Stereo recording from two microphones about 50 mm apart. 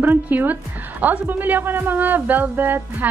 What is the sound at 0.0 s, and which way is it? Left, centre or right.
Speech, right.